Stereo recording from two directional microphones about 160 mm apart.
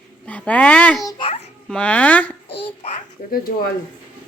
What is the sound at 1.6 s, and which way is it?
Speech, 5° left (ahead or behind).